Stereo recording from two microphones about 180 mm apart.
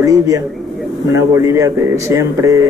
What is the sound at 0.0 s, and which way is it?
A man's voice, 20° right (ahead or behind).